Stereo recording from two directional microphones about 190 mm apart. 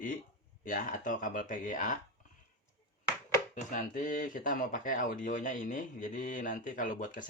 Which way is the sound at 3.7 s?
45° left (ahead or behind).